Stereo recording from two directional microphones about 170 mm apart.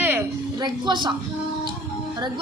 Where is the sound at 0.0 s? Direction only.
10° right (ahead or behind).